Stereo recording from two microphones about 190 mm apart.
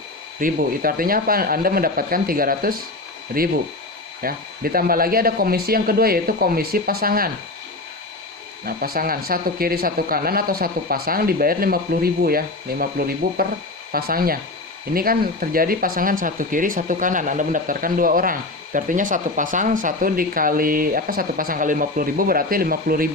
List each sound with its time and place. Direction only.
0.3 s speech: 45° right (ahead or behind)
8.6 s speech: 50° right (ahead or behind)